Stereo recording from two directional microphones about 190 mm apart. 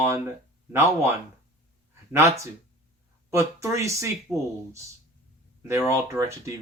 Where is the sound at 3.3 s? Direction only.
15° right (ahead or behind).